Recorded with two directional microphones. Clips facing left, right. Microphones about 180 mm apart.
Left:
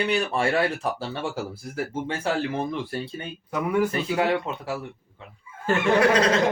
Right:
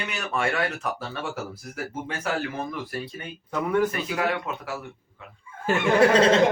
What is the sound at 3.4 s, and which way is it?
Speech, 5° left (ahead or behind).